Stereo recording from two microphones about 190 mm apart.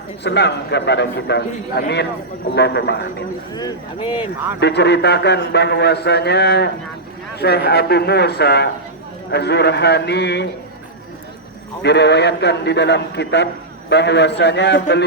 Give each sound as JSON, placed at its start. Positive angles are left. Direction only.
{"t": 0.2, "sound": "a man's voice", "side_deg": 60}
{"t": 3.5, "sound": "speech", "side_deg": 20}
{"t": 4.6, "sound": "a man's voice", "side_deg": 60}
{"t": 11.8, "sound": "a man's voice", "side_deg": 65}